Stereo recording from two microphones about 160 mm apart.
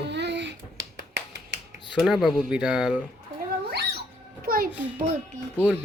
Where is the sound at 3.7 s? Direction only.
90° right.